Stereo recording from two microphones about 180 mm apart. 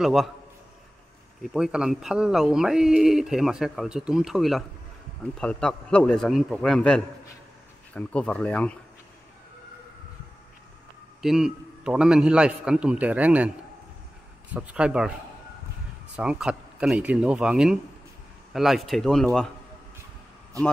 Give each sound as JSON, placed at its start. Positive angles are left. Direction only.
{"t": 0.0, "sound": "speech", "side_deg": 0}
{"t": 1.4, "sound": "speech", "side_deg": -5}
{"t": 11.2, "sound": "speech", "side_deg": -5}
{"t": 14.5, "sound": "speech", "side_deg": -5}
{"t": 16.2, "sound": "speech", "side_deg": -5}
{"t": 20.5, "sound": "a man's voice", "side_deg": -20}